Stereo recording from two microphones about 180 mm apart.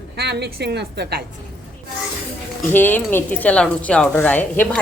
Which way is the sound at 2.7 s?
10° left (ahead or behind).